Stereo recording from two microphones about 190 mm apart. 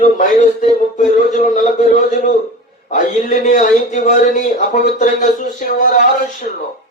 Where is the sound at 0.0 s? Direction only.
40° left (ahead or behind).